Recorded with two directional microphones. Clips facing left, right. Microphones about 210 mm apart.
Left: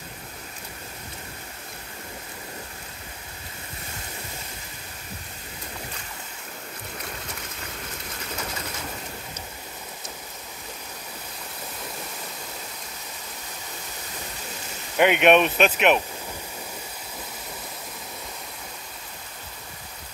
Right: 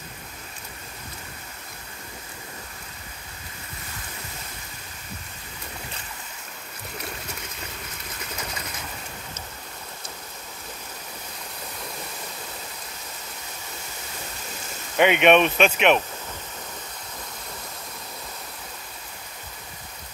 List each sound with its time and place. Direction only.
15.0 s speech: 5° left (ahead or behind)